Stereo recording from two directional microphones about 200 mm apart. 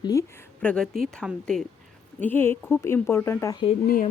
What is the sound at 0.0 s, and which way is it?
Speech, 15° left (ahead or behind).